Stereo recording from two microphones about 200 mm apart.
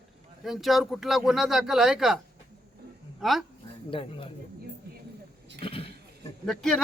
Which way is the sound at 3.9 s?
25° left (ahead or behind).